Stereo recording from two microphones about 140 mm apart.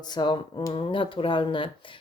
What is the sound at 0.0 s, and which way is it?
Speech, 30° left (ahead or behind).